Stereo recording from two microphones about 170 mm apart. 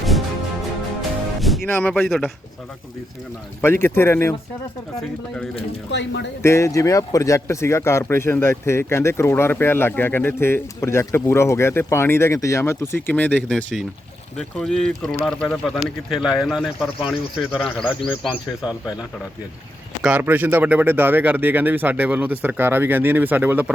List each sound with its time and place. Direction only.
1.4 s music: centre (ahead or behind)
1.6 s speech: 10° left (ahead or behind)
1.9 s speech: centre (ahead or behind)
3.6 s speech: 15° left (ahead or behind)
4.9 s speech: 5° left (ahead or behind)
5.9 s speech: 90° left
6.4 s speech: 15° left (ahead or behind); by 18.7 s 5° right (ahead or behind)
20.0 s speech: 10° right (ahead or behind)